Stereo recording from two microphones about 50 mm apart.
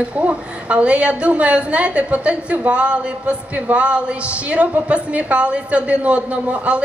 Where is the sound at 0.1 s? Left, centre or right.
Right.